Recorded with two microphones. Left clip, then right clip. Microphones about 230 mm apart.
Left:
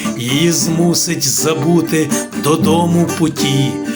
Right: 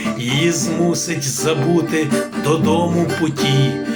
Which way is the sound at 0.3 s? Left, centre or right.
Left.